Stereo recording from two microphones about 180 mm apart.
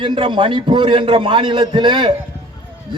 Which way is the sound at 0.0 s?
30° right (ahead or behind).